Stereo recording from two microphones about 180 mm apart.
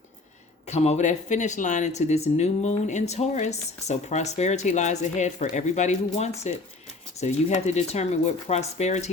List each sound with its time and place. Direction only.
0.7 s speech: 40° left (ahead or behind)